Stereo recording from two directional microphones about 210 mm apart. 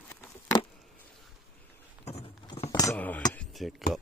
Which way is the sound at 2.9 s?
5° left (ahead or behind).